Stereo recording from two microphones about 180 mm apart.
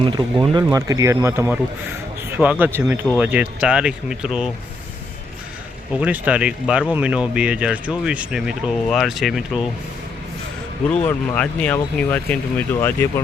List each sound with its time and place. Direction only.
0.0 s speech: 30° right (ahead or behind); by 4.5 s 5° right (ahead or behind)
5.9 s speech: 5° right (ahead or behind)
10.8 s speech: 5° left (ahead or behind)